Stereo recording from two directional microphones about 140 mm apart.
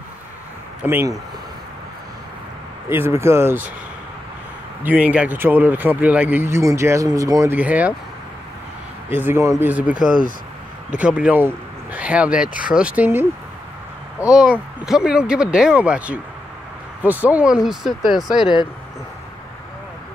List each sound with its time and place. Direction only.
0.8 s speech: 15° right (ahead or behind)
2.9 s speech: 15° right (ahead or behind)
4.8 s speech: 10° right (ahead or behind); by 7.5 s 25° right (ahead or behind)
7.5 s speech: 10° right (ahead or behind)
9.1 s speech: 15° right (ahead or behind)
14.3 s speech: 5° right (ahead or behind)